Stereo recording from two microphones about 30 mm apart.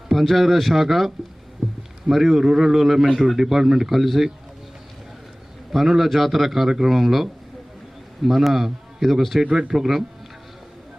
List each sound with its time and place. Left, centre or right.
0.1 s a man's voice: centre
5.7 s a man's voice: centre
6.7 s a man's voice: centre
6.9 s a man's voice: centre
9.5 s speech: right
9.7 s a man's voice: centre